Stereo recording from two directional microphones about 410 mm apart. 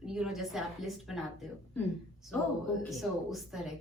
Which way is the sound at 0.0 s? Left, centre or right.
Centre.